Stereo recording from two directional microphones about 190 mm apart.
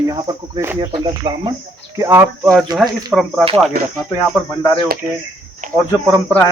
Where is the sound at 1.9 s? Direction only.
15° right (ahead or behind).